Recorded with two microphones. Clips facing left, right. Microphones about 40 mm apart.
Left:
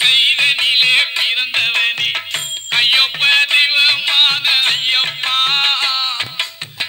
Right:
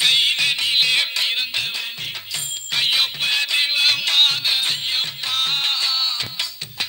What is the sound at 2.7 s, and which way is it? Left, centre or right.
Music, left.